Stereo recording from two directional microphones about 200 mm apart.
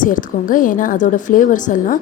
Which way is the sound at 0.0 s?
40° left (ahead or behind).